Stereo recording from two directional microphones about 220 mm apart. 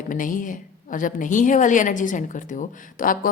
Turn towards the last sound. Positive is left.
turn(degrees=40)  # may be behind; listen again after turning